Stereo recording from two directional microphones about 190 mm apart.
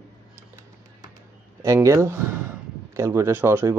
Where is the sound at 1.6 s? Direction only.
15° right (ahead or behind).